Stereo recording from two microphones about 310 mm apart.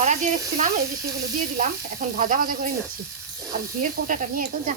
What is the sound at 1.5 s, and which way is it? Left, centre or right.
Speech, right.